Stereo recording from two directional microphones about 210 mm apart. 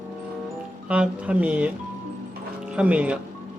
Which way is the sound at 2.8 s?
5° right (ahead or behind).